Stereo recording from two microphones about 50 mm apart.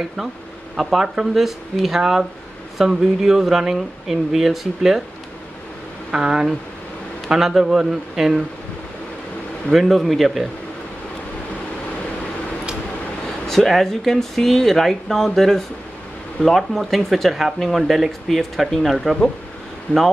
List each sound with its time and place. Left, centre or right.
0.7 s speech: centre
6.1 s speech: centre
9.7 s speech: centre
13.5 s speech: centre
19.9 s speech: left